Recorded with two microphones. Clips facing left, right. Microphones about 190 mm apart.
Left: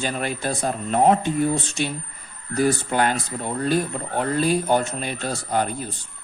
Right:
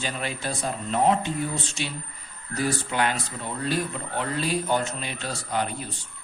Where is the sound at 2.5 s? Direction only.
45° left (ahead or behind).